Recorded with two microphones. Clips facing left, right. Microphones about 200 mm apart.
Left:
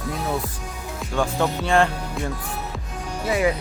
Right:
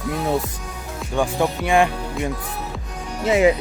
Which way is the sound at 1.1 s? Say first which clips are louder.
Right 2 dB; 15° right (ahead or behind).